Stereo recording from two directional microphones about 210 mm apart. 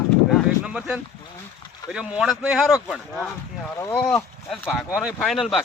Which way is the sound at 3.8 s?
10° left (ahead or behind).